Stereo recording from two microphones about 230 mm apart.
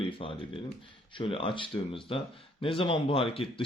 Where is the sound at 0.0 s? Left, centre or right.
Left.